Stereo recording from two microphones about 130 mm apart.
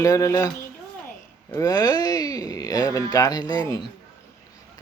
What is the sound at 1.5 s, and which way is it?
Speech, 30° left (ahead or behind).